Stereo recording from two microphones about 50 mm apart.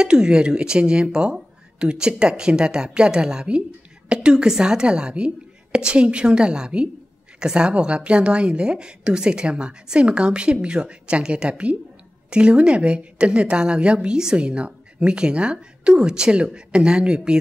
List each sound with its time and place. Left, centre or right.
0.0 s a woman's voice: centre